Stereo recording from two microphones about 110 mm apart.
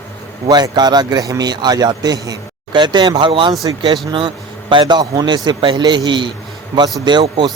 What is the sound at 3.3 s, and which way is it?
A man's voice, 50° right (ahead or behind).